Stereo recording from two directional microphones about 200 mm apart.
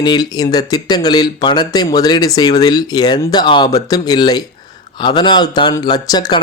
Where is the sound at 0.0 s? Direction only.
20° left (ahead or behind).